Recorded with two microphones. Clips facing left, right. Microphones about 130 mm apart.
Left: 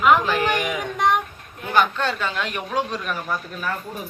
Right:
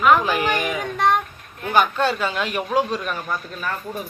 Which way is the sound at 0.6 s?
15° left (ahead or behind).